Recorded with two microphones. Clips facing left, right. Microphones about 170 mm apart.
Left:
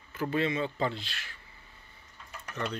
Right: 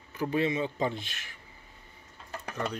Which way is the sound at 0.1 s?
15° right (ahead or behind).